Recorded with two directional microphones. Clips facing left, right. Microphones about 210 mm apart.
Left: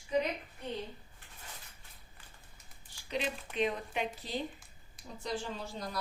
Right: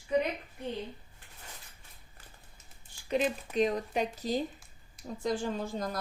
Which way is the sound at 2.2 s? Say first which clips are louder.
Right 4 dB; 45° right (ahead or behind).